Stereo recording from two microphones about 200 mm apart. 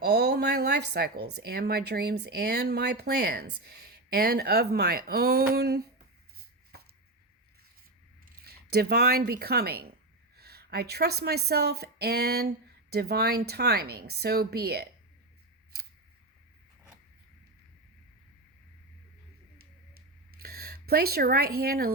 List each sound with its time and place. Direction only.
0.0 s speech: 55° right (ahead or behind)
8.2 s speech: 50° right (ahead or behind)
19.9 s a sound: 50° right (ahead or behind)